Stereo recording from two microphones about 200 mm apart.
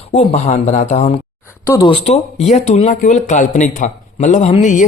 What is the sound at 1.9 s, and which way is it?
Speech, 30° left (ahead or behind).